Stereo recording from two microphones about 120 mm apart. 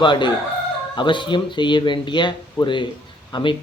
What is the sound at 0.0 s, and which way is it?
A man's voice, 40° left (ahead or behind).